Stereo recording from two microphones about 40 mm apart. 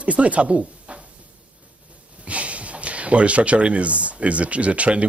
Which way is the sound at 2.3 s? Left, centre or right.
Right.